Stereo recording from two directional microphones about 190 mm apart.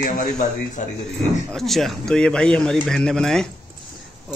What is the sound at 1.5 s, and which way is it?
Speech, centre (ahead or behind).